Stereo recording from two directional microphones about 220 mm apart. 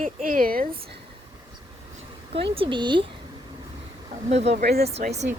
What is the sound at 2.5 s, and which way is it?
Speech, 25° right (ahead or behind).